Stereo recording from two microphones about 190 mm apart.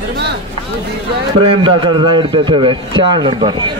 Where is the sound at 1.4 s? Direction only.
25° right (ahead or behind).